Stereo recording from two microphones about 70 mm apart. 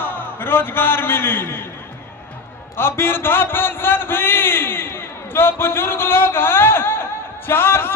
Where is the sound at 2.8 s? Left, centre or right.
Left.